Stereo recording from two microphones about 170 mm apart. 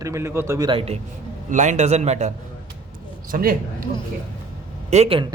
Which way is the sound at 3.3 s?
55° right (ahead or behind).